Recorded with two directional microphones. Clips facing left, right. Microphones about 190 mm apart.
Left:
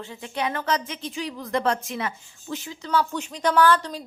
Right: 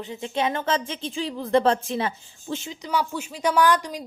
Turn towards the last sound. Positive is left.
turn(degrees=-15)  # may be behind; listen again after turning